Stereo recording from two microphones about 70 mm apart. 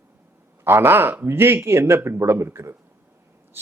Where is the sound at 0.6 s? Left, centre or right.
Right.